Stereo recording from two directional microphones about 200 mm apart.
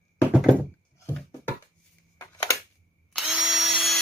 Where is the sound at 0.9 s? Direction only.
10° left (ahead or behind).